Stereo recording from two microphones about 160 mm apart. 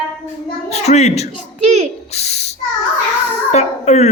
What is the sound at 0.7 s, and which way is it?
Speech, 45° left (ahead or behind).